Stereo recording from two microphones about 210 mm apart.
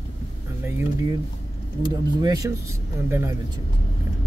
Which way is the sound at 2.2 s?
15° right (ahead or behind).